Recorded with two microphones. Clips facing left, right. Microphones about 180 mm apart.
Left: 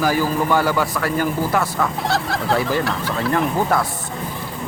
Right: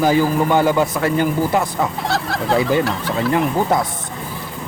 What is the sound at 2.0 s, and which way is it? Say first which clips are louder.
Fowl: right 1 dB; centre (ahead or behind).